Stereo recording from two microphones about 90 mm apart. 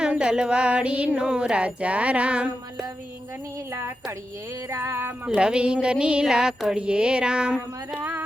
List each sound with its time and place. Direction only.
0.0 s music: 10° right (ahead or behind)
3.7 s speech: 25° right (ahead or behind)
4.7 s music: 25° right (ahead or behind)